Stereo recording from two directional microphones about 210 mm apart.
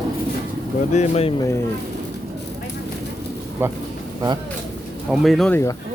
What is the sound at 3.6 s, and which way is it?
Speech, 10° right (ahead or behind).